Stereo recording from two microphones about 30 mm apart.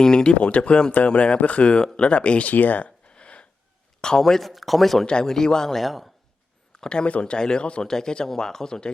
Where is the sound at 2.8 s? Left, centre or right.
Left.